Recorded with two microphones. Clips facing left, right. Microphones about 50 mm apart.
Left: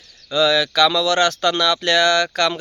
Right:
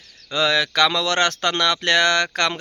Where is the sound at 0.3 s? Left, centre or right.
Right.